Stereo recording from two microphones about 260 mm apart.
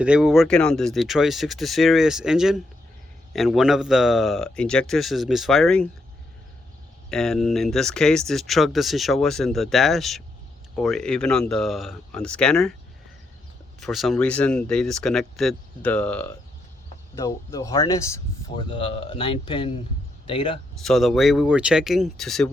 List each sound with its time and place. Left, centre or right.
0.0 s speech: centre
7.1 s speech: centre
13.7 s speech: centre
20.8 s speech: centre